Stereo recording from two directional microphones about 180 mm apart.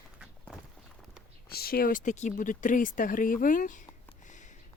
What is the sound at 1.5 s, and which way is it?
Speech, 55° left (ahead or behind).